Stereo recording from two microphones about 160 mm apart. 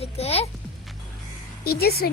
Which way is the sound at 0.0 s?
40° left (ahead or behind).